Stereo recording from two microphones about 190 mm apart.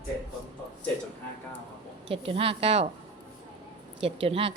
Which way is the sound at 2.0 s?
30° right (ahead or behind).